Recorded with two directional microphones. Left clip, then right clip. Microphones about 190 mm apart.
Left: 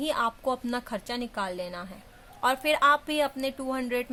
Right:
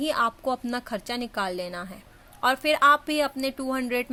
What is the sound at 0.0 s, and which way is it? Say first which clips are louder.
Speech: right 3 dB; 20° right (ahead or behind).